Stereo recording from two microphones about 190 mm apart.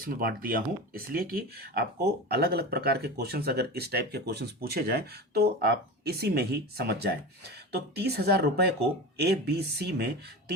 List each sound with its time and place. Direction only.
0.0 s speech: 50° right (ahead or behind)